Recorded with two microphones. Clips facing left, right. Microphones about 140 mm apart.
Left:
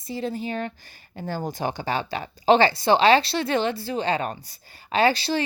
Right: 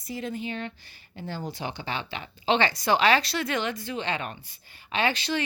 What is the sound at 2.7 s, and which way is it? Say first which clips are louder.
A woman's voice: left 5 dB; 30° left (ahead or behind).